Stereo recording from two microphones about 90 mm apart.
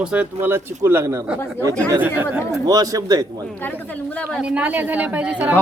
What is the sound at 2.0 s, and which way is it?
Speech, 20° right (ahead or behind).